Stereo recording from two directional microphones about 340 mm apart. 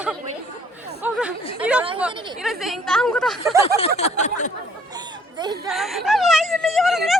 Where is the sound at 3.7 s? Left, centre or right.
Centre.